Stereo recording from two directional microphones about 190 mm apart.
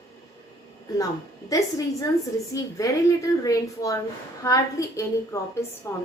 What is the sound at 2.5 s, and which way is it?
A woman's voice, 15° left (ahead or behind).